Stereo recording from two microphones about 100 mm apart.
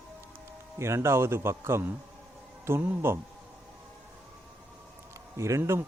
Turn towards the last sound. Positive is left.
turn(degrees=-30)  # may be behind; listen again after turning